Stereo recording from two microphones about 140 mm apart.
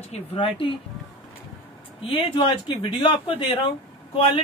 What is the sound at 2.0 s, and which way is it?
Speech, 40° left (ahead or behind).